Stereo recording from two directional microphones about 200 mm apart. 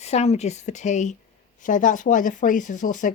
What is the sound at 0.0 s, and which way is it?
Speech, 30° left (ahead or behind).